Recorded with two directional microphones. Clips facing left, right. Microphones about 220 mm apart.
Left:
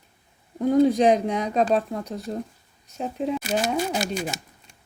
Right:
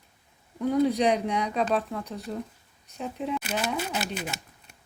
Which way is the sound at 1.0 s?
40° left (ahead or behind).